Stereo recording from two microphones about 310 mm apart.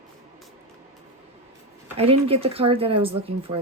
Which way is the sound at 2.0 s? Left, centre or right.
Centre.